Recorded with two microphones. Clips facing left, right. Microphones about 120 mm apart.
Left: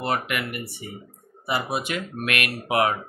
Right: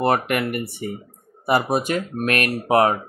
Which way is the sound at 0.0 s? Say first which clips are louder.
Right 7 dB; 45° right (ahead or behind).